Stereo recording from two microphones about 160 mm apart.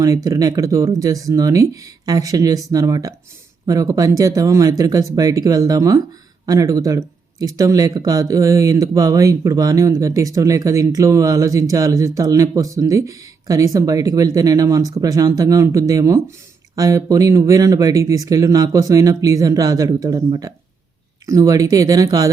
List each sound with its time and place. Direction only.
0.0 s speech: 20° right (ahead or behind)